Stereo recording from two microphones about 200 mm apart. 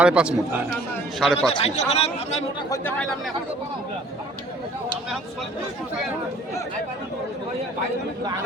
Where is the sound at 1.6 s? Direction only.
35° left (ahead or behind).